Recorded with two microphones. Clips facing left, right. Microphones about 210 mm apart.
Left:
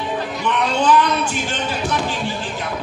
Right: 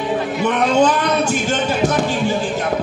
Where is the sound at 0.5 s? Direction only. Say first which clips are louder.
Right 2 dB; 45° right (ahead or behind).